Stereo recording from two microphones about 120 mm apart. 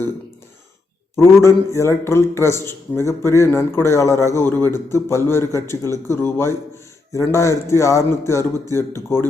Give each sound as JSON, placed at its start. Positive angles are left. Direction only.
{"t": 1.1, "sound": "a man's voice", "side_deg": 25}